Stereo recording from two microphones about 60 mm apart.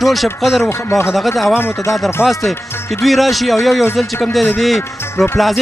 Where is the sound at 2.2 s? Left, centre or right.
Left.